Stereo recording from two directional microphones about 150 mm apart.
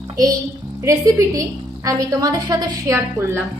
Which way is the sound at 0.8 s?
20° right (ahead or behind).